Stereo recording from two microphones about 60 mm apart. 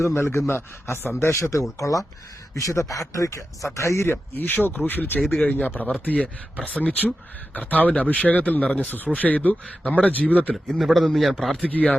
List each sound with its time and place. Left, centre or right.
0.1 s a man's voice: left
1.2 s speech: left
1.8 s speech: left
4.1 s speech: left
5.2 s speech: centre
5.5 s speech: left
10.5 s a man's voice: centre
11.6 s speech: left